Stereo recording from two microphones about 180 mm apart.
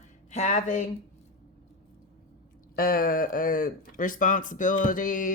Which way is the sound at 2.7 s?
55° left (ahead or behind).